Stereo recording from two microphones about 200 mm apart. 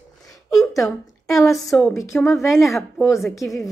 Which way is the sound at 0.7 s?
15° left (ahead or behind).